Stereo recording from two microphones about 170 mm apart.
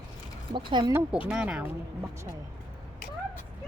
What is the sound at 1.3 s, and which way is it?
Speech, 5° right (ahead or behind).